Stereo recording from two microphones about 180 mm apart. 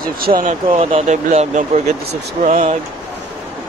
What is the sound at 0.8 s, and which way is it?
Speech, 40° right (ahead or behind).